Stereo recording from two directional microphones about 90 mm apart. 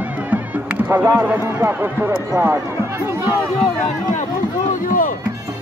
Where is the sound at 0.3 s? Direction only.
20° right (ahead or behind).